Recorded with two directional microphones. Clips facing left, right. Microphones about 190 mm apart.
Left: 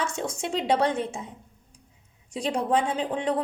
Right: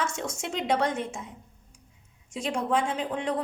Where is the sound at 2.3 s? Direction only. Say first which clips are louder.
Left 2 dB; 35° left (ahead or behind).